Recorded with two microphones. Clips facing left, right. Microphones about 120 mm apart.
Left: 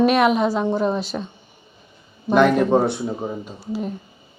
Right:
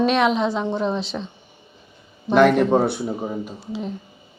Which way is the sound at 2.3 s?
Centre (ahead or behind).